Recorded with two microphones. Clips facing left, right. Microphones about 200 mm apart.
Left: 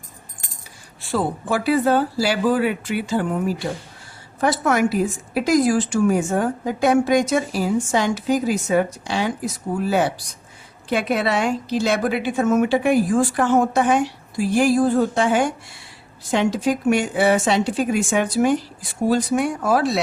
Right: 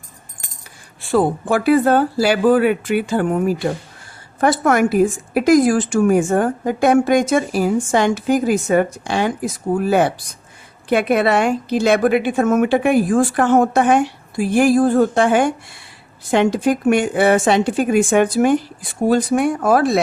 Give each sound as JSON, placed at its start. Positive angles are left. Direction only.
{"t": 1.1, "sound": "a woman's voice", "side_deg": -55}